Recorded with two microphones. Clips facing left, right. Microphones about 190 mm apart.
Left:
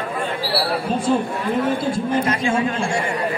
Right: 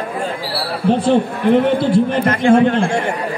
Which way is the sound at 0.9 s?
70° right (ahead or behind).